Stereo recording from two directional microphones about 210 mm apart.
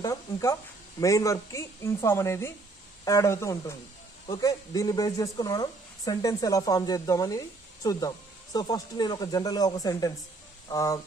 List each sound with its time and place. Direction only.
0.0 s speech: 15° left (ahead or behind)